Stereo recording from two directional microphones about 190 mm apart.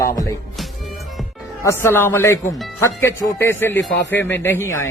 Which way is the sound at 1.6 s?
15° left (ahead or behind).